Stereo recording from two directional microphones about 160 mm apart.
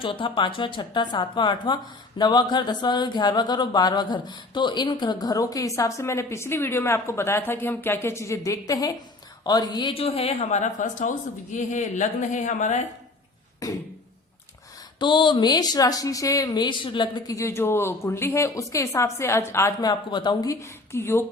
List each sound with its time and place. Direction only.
0.0 s speech: 30° left (ahead or behind); by 12.8 s 50° left (ahead or behind)
13.6 s speech: 20° left (ahead or behind)
14.9 s speech: 30° left (ahead or behind)